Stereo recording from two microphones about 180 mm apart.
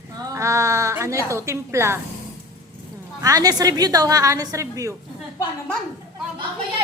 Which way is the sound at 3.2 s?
20° right (ahead or behind).